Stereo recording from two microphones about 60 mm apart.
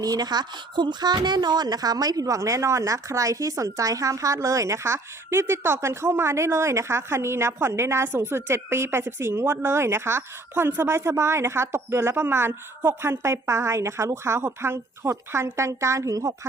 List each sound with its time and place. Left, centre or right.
1.6 s a woman's voice: right